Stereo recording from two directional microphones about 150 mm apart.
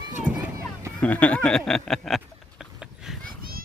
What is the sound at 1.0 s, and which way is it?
Speech, 10° left (ahead or behind).